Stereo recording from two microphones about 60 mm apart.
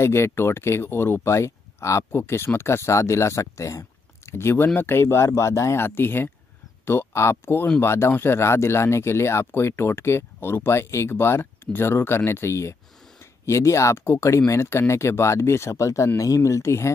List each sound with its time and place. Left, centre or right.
0.0 s speech: left
4.3 s speech: left
14.0 s speech: left
15.7 s speech: left